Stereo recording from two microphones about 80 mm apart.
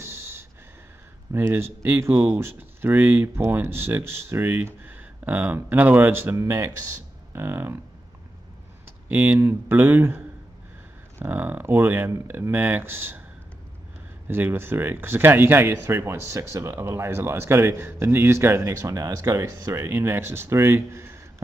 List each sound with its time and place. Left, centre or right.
0.0 s a sound: right
1.3 s speech: right
6.3 s speech: right
9.1 s speech: right
14.2 s speech: right